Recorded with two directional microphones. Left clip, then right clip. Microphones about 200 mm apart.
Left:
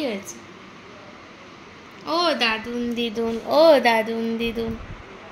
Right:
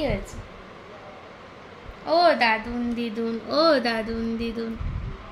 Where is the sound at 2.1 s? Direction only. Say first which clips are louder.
Right 2 dB; 15° right (ahead or behind).